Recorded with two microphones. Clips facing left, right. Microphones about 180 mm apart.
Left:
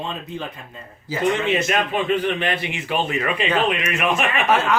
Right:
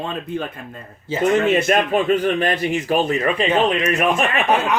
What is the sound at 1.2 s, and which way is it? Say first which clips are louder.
A man's voice: right 4 dB; 45° right (ahead or behind).